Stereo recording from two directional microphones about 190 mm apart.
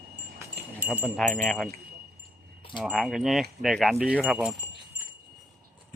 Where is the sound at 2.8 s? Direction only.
Centre (ahead or behind).